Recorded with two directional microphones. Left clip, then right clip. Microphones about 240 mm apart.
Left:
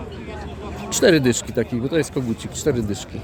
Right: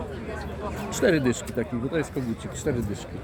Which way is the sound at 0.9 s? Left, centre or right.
Left.